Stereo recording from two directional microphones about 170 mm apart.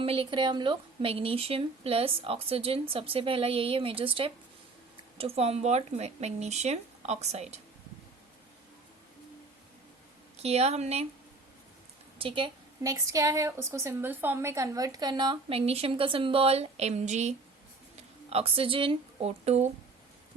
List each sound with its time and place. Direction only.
0.0 s a woman's voice: 30° right (ahead or behind)
10.3 s a woman's voice: 40° right (ahead or behind)
12.2 s a woman's voice: 30° right (ahead or behind)
12.8 s a woman's voice: 20° right (ahead or behind); by 19.7 s 40° right (ahead or behind)